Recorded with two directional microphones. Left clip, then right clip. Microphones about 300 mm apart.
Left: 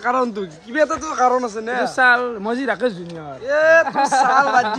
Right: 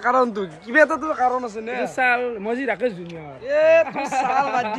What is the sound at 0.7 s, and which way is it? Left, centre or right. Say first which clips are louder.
Speech: right 2 dB; right.